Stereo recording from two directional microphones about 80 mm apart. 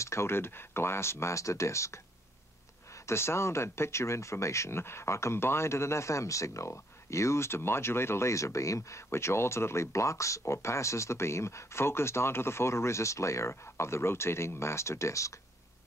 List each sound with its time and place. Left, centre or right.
0.0 s speech: left
3.1 s speech: left